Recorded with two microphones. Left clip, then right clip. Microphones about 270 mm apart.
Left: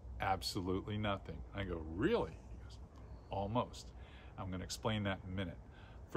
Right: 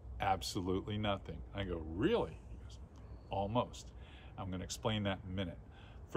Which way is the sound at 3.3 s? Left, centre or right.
Centre.